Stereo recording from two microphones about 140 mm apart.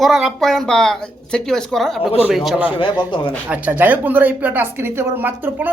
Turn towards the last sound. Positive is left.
turn(degrees=-15)  # may be behind; listen again after turning